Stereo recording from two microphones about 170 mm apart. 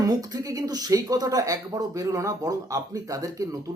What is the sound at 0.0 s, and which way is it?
Speech, 20° right (ahead or behind).